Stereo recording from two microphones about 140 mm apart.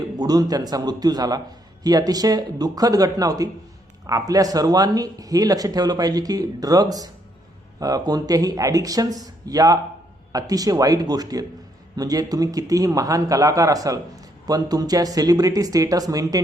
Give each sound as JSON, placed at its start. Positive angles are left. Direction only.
{"t": 0.2, "sound": "speech", "side_deg": -30}